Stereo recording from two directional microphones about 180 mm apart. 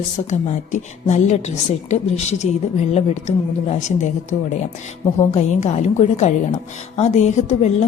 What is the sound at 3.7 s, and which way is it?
A woman's voice, 40° left (ahead or behind).